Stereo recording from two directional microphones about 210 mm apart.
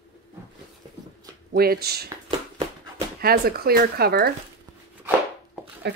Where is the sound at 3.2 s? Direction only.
45° right (ahead or behind).